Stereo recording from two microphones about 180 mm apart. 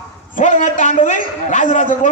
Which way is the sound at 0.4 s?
45° left (ahead or behind).